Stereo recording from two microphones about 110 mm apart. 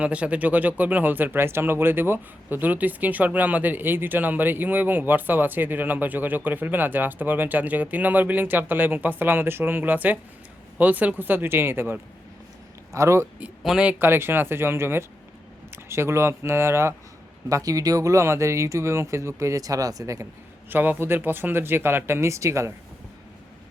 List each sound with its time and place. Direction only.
0.0 s speech: 10° right (ahead or behind); by 13.2 s 25° right (ahead or behind)
13.6 s speech: 5° right (ahead or behind)
14.0 s speech: 20° right (ahead or behind)
20.7 s speech: 15° right (ahead or behind)